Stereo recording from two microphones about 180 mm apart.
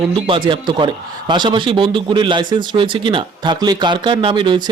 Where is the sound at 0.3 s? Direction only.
30° right (ahead or behind).